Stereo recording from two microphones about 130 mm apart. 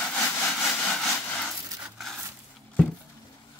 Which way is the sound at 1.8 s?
Centre (ahead or behind).